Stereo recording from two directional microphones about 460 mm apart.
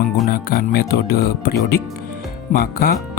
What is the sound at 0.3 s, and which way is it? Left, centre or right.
Speech, centre.